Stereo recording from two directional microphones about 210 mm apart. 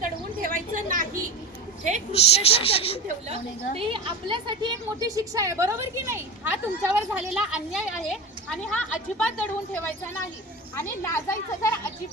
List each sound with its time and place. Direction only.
0.0 s a sound: 40° right (ahead or behind)
2.1 s speech: 30° left (ahead or behind)
3.8 s a woman's voice: 25° right (ahead or behind); by 11.8 s 15° left (ahead or behind)